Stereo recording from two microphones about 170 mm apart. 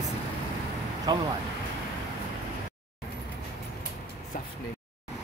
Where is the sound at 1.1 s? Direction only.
25° right (ahead or behind).